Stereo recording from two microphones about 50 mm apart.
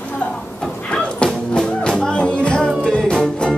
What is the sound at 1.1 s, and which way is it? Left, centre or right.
Music, centre.